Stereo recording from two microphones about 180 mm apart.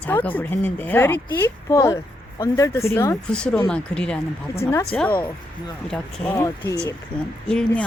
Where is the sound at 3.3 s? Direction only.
5° left (ahead or behind).